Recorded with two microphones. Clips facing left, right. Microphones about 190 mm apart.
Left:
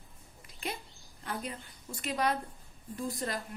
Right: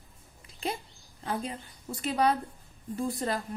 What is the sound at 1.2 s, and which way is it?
Speech, 30° right (ahead or behind).